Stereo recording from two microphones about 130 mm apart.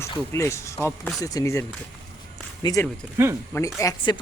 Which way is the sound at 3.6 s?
25° left (ahead or behind).